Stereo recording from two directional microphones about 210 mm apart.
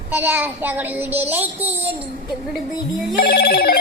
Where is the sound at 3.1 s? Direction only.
45° left (ahead or behind).